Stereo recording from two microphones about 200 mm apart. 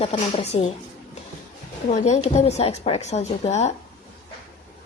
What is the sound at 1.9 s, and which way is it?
A woman's voice, 35° left (ahead or behind).